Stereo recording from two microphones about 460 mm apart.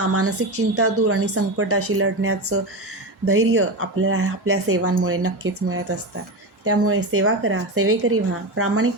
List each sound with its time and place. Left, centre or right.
0.1 s speech: right